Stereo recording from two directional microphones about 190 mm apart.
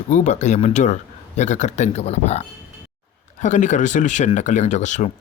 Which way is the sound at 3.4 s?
40° left (ahead or behind).